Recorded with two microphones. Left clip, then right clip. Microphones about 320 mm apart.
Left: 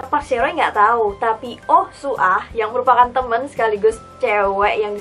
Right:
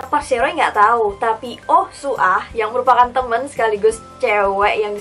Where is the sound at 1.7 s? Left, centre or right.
Centre.